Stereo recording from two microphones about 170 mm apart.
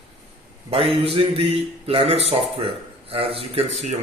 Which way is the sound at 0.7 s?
35° right (ahead or behind).